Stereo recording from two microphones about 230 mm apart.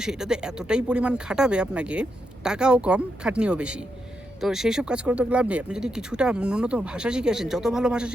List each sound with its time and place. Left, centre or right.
0.0 s speech: centre